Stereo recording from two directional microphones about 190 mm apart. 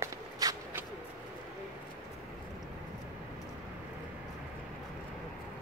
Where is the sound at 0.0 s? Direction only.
15° right (ahead or behind).